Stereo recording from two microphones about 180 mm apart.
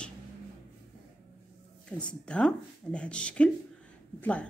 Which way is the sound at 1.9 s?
5° left (ahead or behind).